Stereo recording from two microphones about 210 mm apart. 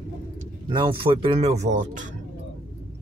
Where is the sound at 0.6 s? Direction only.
25° right (ahead or behind).